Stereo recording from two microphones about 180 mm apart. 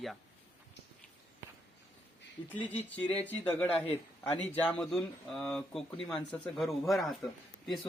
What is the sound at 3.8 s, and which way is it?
Speech, 35° left (ahead or behind).